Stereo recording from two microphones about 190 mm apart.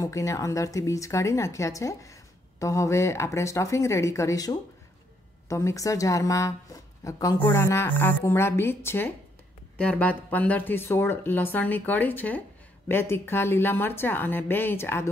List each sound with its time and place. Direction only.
0.0 s speech: 15° left (ahead or behind)